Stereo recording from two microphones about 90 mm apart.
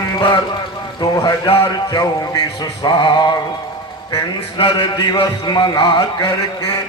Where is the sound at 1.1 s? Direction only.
45° left (ahead or behind).